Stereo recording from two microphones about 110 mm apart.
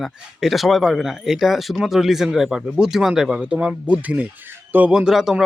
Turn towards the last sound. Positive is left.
turn(degrees=-5)  # may be behind; listen again after turning